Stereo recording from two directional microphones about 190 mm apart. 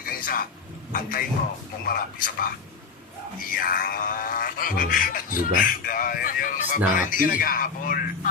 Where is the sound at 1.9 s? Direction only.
50° left (ahead or behind).